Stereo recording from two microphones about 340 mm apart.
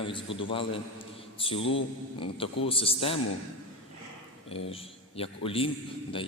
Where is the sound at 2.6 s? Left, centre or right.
Centre.